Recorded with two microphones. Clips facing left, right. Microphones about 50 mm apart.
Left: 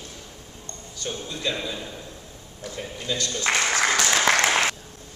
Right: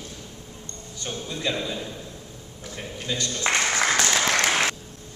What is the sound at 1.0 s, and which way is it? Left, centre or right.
Speech, centre.